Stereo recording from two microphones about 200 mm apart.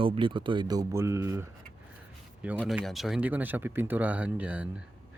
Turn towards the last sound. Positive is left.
turn(degrees=-5)  # may be behind; listen again after turning